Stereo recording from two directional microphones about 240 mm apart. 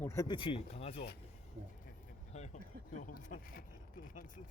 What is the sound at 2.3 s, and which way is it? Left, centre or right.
Speech, left.